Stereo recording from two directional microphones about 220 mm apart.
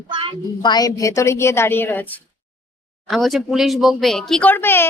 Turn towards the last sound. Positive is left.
turn(degrees=10)  # may be behind; listen again after turning